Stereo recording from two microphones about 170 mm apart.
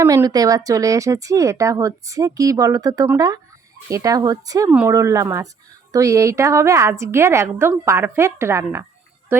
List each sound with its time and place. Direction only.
0.0 s a woman's voice: 15° right (ahead or behind)